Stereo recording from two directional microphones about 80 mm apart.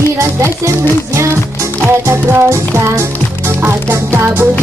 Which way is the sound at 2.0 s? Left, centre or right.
Right.